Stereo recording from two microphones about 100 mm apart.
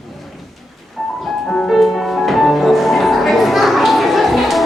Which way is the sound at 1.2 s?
5° left (ahead or behind).